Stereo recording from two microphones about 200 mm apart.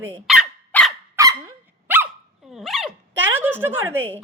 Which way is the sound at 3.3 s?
10° right (ahead or behind).